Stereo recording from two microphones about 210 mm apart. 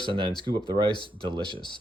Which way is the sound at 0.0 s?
25° right (ahead or behind).